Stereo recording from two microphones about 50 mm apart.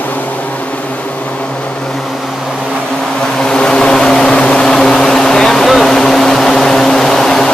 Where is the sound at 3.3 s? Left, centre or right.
Centre.